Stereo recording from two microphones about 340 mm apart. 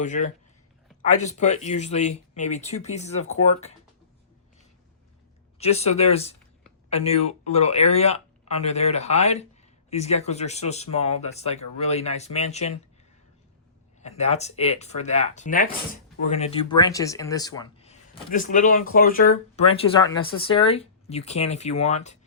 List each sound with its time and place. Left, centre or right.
0.0 s speech: left
1.4 s speech: centre
5.5 s speech: centre
14.0 s speech: centre